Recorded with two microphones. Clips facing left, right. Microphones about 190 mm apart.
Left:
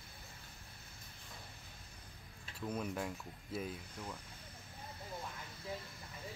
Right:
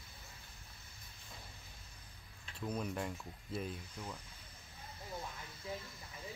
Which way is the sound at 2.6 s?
5° left (ahead or behind).